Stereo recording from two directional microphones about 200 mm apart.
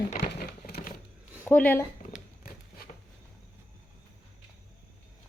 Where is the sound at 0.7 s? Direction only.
45° left (ahead or behind).